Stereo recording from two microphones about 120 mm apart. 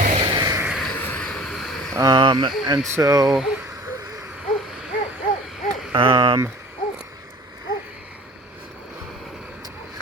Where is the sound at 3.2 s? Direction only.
5° right (ahead or behind).